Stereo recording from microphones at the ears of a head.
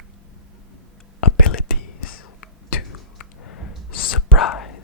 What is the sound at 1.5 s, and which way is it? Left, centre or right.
Whispering, left.